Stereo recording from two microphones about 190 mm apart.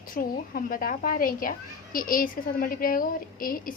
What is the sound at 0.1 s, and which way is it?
A child's voice, 50° left (ahead or behind).